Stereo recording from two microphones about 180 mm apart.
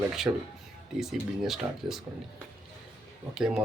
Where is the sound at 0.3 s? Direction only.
15° right (ahead or behind).